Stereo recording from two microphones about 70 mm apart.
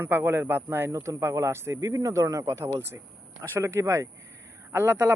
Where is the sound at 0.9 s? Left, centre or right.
Right.